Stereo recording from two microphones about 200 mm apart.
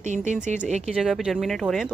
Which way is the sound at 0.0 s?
35° right (ahead or behind).